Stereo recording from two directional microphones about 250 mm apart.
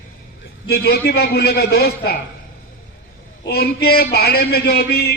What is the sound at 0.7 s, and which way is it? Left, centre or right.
A man's voice, left.